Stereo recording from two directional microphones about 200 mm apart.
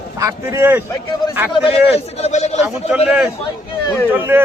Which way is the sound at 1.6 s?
30° left (ahead or behind).